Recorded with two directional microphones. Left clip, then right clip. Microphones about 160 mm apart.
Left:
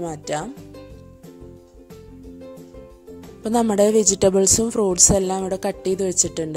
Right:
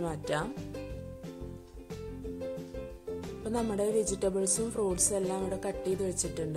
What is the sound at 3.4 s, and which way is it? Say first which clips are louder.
Speech: left 14 dB; 85° left.